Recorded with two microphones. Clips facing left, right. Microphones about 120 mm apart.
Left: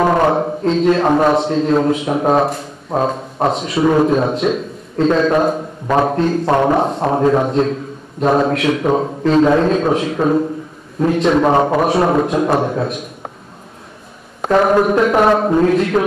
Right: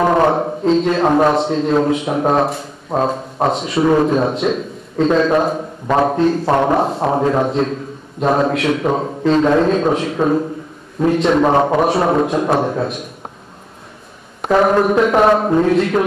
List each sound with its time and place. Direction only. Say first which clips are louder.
0.0 s a man's voice: even; centre (ahead or behind)
14.4 s a man's voice: left 1 dB; centre (ahead or behind)